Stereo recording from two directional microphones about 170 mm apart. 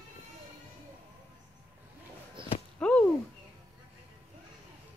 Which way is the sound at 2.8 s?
5° left (ahead or behind).